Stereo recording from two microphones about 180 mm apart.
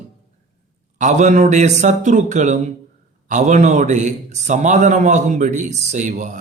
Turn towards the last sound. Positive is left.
turn(degrees=-45)  # may be behind; listen again after turning